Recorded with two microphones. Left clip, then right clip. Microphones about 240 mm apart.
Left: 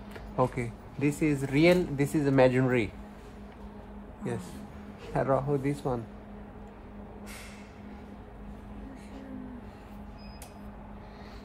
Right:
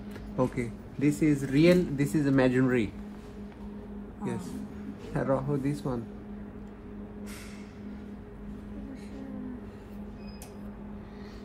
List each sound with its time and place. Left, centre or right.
0.4 s speech: left
5.1 s speech: left